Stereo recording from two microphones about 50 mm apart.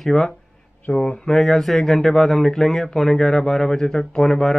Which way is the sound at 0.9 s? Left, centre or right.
Left.